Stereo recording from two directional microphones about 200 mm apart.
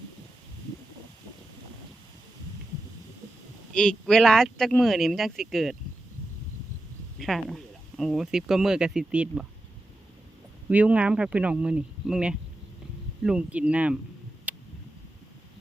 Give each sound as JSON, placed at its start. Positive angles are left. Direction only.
{"t": 3.8, "sound": "speech", "side_deg": 5}
{"t": 7.2, "sound": "speech", "side_deg": 0}
{"t": 10.7, "sound": "speech", "side_deg": -5}
{"t": 14.5, "sound": "a sound", "side_deg": -10}